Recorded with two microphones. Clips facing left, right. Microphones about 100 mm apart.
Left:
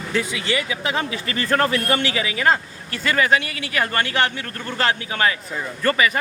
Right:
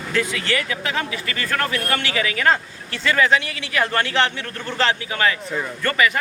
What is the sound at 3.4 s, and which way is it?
Speech, 50° left (ahead or behind).